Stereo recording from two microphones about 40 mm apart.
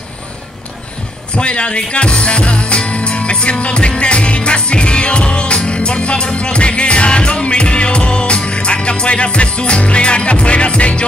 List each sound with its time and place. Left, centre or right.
1.3 s music: left